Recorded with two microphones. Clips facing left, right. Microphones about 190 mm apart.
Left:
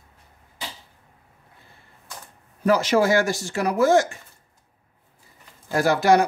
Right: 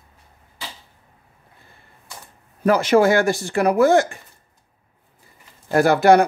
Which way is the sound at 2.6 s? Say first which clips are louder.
Right 4 dB; 55° right (ahead or behind).